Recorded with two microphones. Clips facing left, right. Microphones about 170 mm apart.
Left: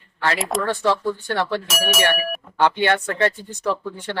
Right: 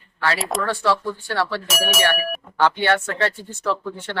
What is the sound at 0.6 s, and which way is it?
Speech, 20° left (ahead or behind).